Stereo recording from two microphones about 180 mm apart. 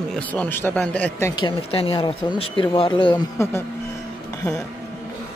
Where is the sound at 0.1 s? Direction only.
10° left (ahead or behind).